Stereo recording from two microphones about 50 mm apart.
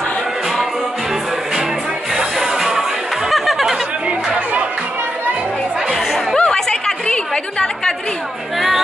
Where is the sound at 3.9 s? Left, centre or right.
Right.